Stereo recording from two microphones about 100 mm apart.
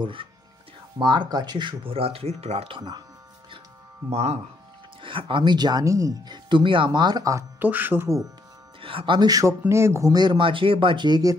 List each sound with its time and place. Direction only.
0.0 s speech: 60° right (ahead or behind); by 2.8 s 85° right
4.1 s speech: 90° right
5.0 s speech: 55° right (ahead or behind); by 7.4 s 40° right (ahead or behind)
7.5 s speech: 20° right (ahead or behind)
8.8 s speech: 60° right (ahead or behind)
9.3 s speech: 30° right (ahead or behind)
10.1 s speech: 50° right (ahead or behind)